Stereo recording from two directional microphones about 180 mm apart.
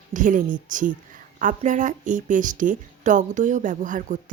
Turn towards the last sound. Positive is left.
turn(degrees=-45)  # may be behind; listen again after turning